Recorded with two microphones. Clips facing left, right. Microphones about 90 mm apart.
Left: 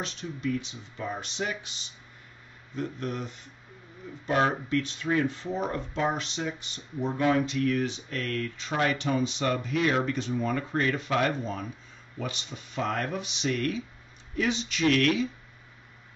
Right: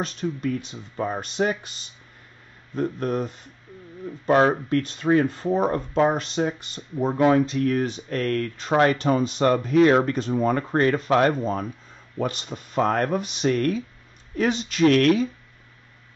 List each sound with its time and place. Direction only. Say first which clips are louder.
0.0 s speech: right 6 dB; 45° right (ahead or behind)